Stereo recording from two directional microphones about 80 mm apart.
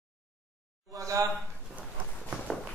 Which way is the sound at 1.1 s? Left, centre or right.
Right.